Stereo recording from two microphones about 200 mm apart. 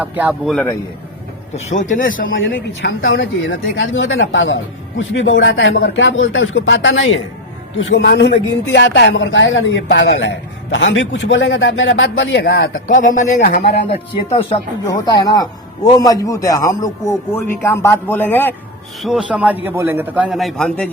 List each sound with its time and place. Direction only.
0.0 s a man's voice: 10° right (ahead or behind)
1.5 s speech: 35° left (ahead or behind)
2.2 s a woman's voice: 70° left (ahead or behind)
8.0 s a woman's voice: 60° left (ahead or behind)
12.9 s speech: 40° left (ahead or behind)
13.8 s speech: 30° left (ahead or behind)
14.8 s speech: 20° left (ahead or behind)
19.0 s a man's voice: 5° right (ahead or behind)